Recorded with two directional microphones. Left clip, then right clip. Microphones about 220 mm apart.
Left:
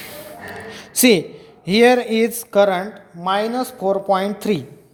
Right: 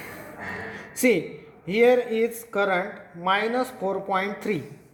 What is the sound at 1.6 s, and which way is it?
A man's voice, 45° left (ahead or behind).